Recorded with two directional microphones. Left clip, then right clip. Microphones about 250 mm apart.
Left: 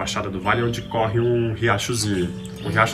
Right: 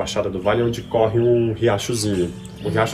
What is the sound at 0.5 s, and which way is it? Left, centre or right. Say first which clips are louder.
Speech: right 1 dB; centre.